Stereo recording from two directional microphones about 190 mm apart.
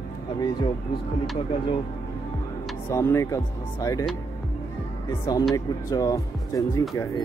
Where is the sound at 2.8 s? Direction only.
15° left (ahead or behind).